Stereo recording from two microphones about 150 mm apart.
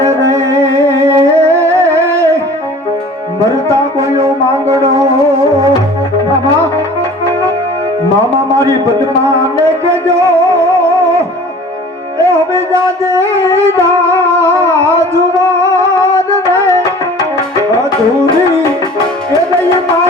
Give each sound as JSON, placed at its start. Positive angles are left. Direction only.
{"t": 0.0, "sound": "music", "side_deg": -20}
{"t": 3.7, "sound": "music", "side_deg": -20}
{"t": 9.2, "sound": "music", "side_deg": -20}
{"t": 12.2, "sound": "music", "side_deg": -20}